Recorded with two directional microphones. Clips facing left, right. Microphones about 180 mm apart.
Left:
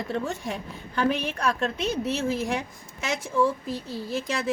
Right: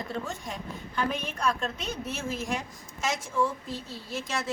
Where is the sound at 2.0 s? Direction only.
70° left (ahead or behind).